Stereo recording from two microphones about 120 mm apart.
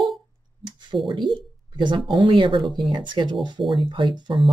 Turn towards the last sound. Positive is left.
turn(degrees=-40)  # may be behind; listen again after turning